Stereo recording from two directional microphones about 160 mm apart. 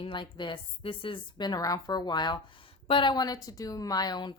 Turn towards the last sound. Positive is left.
turn(degrees=25)  # may be behind; listen again after turning